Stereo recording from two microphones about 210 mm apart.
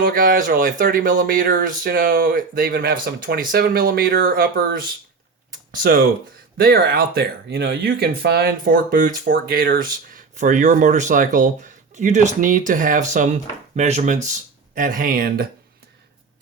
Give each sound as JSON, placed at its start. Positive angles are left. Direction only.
{"t": 0.0, "sound": "speech", "side_deg": -40}